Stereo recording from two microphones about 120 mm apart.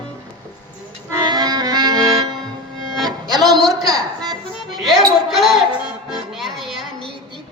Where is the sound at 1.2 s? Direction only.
35° right (ahead or behind).